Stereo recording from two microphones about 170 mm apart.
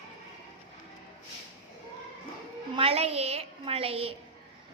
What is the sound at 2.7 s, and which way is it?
A woman's voice, 35° right (ahead or behind).